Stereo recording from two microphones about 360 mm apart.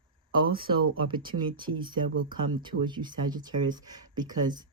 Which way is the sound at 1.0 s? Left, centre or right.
Centre.